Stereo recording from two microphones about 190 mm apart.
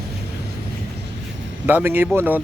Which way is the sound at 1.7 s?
10° right (ahead or behind).